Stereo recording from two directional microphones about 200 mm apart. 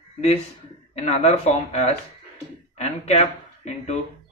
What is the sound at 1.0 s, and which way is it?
A man's voice, 30° left (ahead or behind).